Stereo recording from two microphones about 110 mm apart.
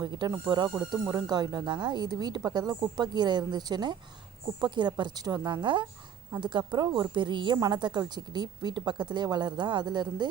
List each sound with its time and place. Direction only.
0.0 s a woman's voice: 40° right (ahead or behind)